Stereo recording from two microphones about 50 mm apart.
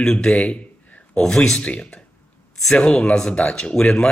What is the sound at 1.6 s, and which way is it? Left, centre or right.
Speech, left.